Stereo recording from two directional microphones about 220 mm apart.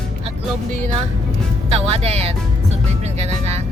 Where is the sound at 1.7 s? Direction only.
25° right (ahead or behind).